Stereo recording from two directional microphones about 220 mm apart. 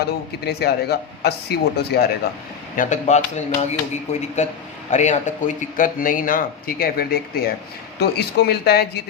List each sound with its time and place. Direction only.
0.4 s speech: 45° left (ahead or behind)
2.7 s speech: 35° left (ahead or behind)